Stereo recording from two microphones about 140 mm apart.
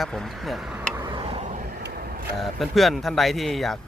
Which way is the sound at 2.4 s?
Centre (ahead or behind).